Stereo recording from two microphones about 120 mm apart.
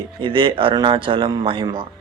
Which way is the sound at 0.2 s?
45° right (ahead or behind).